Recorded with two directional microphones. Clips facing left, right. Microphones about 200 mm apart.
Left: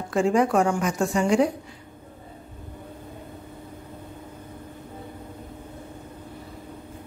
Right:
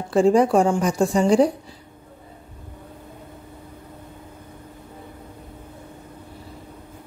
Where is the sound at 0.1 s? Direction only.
35° right (ahead or behind).